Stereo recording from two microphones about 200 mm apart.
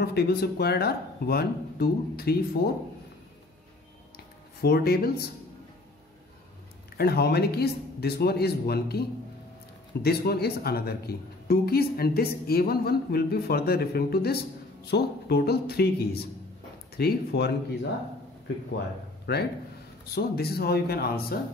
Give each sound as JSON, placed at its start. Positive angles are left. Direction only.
{"t": 0.0, "sound": "speech", "side_deg": 55}
{"t": 4.6, "sound": "speech", "side_deg": 50}
{"t": 7.0, "sound": "speech", "side_deg": 50}
{"t": 10.0, "sound": "speech", "side_deg": 50}
{"t": 19.3, "sound": "a man's voice", "side_deg": 55}